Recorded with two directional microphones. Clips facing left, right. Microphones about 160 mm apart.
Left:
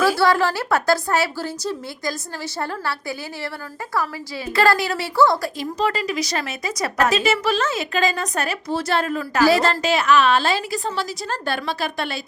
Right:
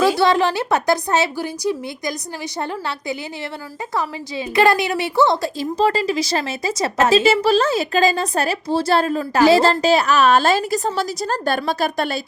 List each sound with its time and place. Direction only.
0.0 s a woman's voice: 20° right (ahead or behind); by 12.2 s 40° right (ahead or behind)